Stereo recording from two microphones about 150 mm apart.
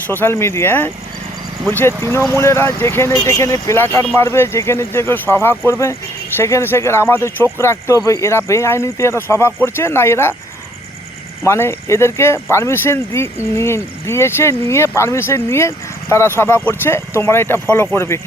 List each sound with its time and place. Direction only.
0.1 s speech: 15° left (ahead or behind)
11.4 s speech: 15° left (ahead or behind)